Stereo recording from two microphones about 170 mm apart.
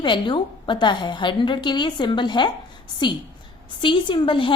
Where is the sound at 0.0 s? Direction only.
30° left (ahead or behind).